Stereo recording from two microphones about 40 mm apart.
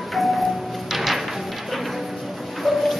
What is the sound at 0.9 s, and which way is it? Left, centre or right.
Music, centre.